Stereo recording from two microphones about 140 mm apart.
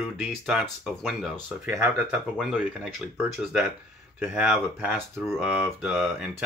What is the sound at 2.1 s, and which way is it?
Speech, 5° right (ahead or behind).